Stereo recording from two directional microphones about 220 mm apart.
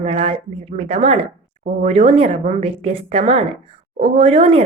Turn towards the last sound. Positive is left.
turn(degrees=-25)  # may be behind; listen again after turning